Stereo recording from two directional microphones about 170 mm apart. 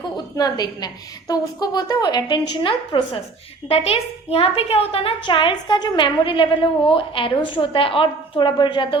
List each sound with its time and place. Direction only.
0.3 s a woman's voice: 25° left (ahead or behind)